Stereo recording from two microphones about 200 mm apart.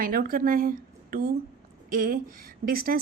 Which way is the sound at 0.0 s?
45° right (ahead or behind).